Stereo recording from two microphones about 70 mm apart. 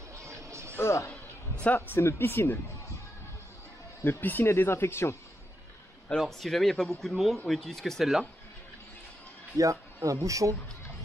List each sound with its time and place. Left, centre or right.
0.1 s music: right
0.7 s speech: left
1.6 s a man's voice: left
2.0 s speech: left
4.0 s speech: left
6.2 s speech: centre
9.5 s speech: right